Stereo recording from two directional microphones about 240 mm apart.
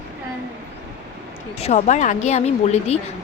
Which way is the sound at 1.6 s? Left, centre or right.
Left.